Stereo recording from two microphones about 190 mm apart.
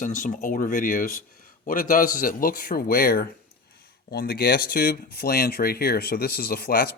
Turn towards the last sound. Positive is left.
turn(degrees=55)  # may be behind; listen again after turning